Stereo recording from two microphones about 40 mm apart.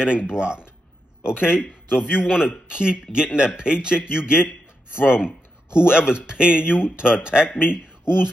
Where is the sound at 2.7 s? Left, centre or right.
Right.